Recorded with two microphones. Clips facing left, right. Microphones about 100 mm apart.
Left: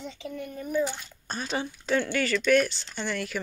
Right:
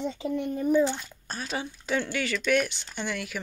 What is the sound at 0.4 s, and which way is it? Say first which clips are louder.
Speech: right 10 dB; 25° right (ahead or behind).